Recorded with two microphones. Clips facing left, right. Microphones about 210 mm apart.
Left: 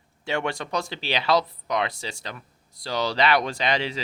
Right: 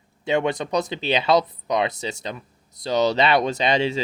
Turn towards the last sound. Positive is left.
turn(degrees=-25)  # may be behind; listen again after turning